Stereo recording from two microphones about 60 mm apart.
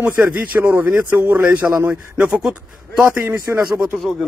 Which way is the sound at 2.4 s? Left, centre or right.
Centre.